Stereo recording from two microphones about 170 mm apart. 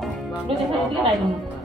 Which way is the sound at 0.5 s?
35° right (ahead or behind).